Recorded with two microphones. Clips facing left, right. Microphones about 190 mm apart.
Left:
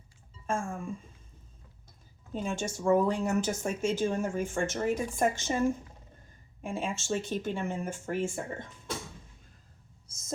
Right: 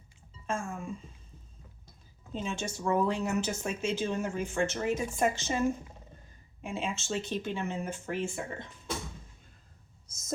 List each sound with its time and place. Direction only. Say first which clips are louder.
0.4 s speech: left 2 dB; 50° left (ahead or behind)
2.4 s speech: left 2 dB; 50° left (ahead or behind)
10.1 s a sound: right 2 dB; 30° left (ahead or behind)